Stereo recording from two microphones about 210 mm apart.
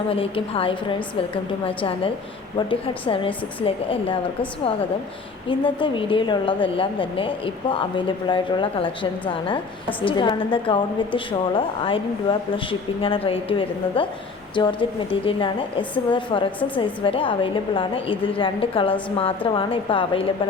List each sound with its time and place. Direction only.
0.1 s a woman's voice: 25° left (ahead or behind)
5.5 s a woman's voice: 25° left (ahead or behind)